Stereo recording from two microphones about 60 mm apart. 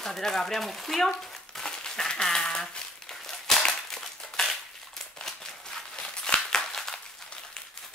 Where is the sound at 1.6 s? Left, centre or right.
Centre.